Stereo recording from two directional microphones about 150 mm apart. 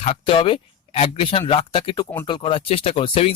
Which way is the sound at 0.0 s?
40° left (ahead or behind).